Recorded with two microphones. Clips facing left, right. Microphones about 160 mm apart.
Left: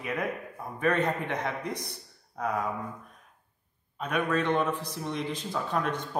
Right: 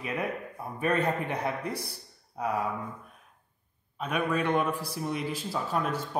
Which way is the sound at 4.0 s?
10° right (ahead or behind).